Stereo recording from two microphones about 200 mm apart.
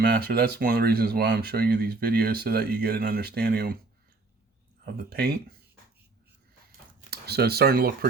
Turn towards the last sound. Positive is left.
turn(degrees=-50)  # may be behind; listen again after turning